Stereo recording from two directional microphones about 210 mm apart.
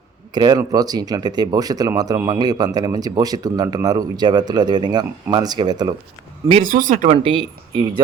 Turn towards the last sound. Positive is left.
turn(degrees=-25)  # may be behind; listen again after turning